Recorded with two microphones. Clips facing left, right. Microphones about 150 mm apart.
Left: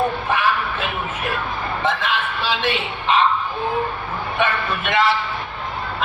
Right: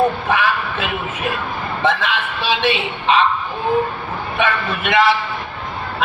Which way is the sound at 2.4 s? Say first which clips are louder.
Right 3 dB; 75° right (ahead or behind).